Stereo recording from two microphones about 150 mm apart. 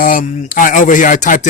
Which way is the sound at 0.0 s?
65° left (ahead or behind).